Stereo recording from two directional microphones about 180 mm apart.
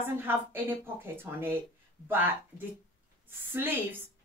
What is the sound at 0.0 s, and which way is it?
Speech, 10° right (ahead or behind).